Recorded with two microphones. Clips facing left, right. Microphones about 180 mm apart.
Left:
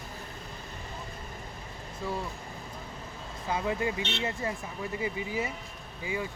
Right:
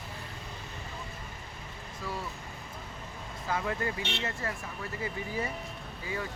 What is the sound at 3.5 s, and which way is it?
Speech, 20° left (ahead or behind).